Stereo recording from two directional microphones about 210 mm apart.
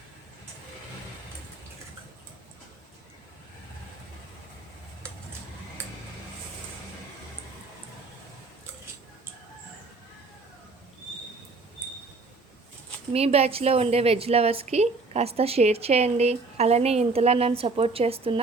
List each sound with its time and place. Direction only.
13.1 s a woman's voice: 30° right (ahead or behind)